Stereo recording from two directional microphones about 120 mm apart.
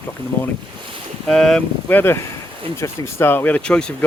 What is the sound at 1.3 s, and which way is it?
Speech, 5° left (ahead or behind).